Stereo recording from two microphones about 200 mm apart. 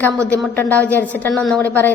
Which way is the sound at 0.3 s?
10° left (ahead or behind).